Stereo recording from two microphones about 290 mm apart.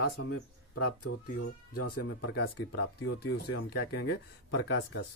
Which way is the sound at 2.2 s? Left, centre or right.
Left.